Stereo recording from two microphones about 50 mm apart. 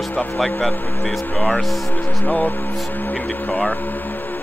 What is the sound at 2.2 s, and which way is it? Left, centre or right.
Speech, left.